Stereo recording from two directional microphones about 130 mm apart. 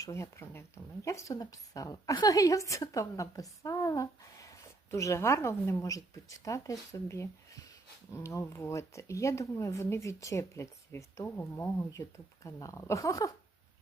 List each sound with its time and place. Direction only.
0.0 s a woman's voice: 20° left (ahead or behind)